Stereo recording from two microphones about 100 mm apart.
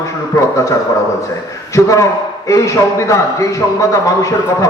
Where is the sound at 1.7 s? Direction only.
30° left (ahead or behind).